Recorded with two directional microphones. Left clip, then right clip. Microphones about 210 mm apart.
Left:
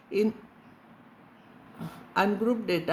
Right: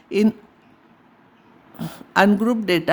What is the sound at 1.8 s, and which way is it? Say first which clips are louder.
Speech: right 9 dB; 55° right (ahead or behind).